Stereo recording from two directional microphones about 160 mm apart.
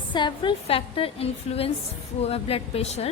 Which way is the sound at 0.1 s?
30° left (ahead or behind).